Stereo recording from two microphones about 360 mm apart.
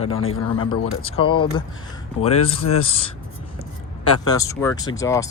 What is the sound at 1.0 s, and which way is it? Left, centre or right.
Speech, centre.